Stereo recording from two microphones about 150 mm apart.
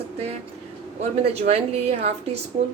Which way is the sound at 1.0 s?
45° right (ahead or behind).